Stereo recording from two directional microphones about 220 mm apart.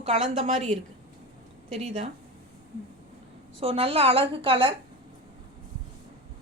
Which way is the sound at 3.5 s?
25° right (ahead or behind).